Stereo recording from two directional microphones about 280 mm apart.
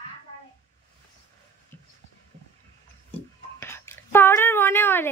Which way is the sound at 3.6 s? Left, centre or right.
Centre.